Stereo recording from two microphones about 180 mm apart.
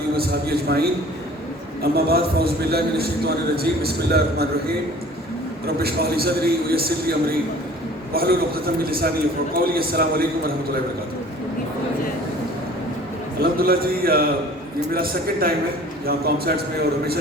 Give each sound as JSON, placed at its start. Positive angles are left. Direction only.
{"t": 0.2, "sound": "a man's voice", "side_deg": -60}
{"t": 5.6, "sound": "a man's voice", "side_deg": -60}
{"t": 13.4, "sound": "a man's voice", "side_deg": -55}